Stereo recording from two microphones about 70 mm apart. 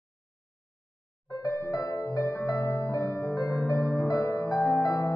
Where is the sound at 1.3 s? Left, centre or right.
Left.